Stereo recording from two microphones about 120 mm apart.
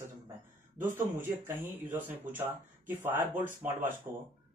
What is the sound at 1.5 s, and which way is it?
Speech, 15° right (ahead or behind).